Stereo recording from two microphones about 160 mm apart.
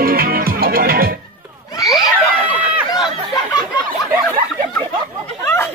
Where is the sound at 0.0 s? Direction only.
70° right (ahead or behind).